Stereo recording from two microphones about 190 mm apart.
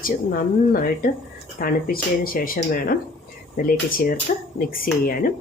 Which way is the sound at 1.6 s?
50° left (ahead or behind).